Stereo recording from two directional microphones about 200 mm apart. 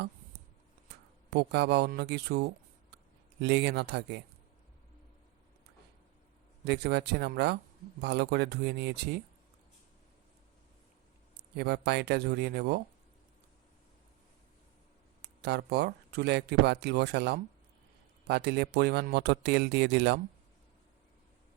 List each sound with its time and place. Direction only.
1.3 s speech: 55° right (ahead or behind)
6.7 s speech: 55° right (ahead or behind)
11.5 s speech: 55° right (ahead or behind)
15.2 s speech: 55° right (ahead or behind)